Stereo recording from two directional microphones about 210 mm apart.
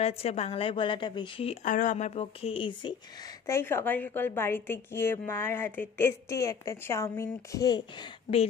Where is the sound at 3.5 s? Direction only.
10° left (ahead or behind).